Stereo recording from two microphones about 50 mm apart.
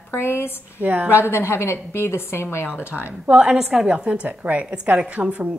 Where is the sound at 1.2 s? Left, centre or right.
Left.